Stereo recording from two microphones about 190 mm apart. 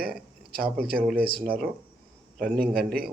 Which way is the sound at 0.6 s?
50° right (ahead or behind).